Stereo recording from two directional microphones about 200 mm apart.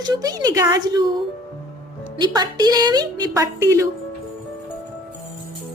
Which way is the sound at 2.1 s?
20° right (ahead or behind).